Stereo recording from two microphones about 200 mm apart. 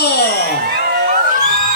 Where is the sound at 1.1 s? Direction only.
40° right (ahead or behind).